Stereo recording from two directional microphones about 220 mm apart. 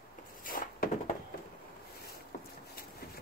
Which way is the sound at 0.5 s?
40° left (ahead or behind).